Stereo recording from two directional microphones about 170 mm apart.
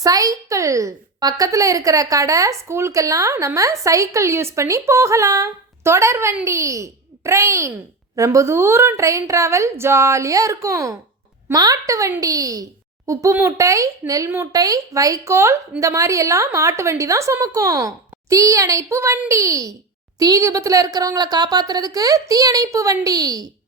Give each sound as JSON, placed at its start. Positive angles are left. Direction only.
{"t": 0.0, "sound": "a woman's voice", "side_deg": -20}